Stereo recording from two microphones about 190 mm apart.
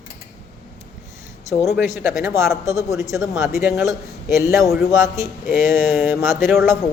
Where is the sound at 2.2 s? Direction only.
15° right (ahead or behind).